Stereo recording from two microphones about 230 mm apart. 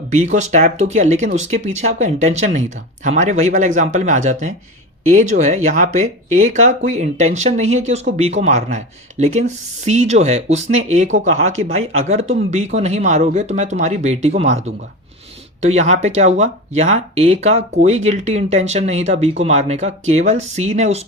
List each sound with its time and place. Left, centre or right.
0.1 s speech: right